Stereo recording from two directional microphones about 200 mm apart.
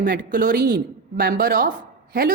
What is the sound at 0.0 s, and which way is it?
A woman's voice, 50° right (ahead or behind).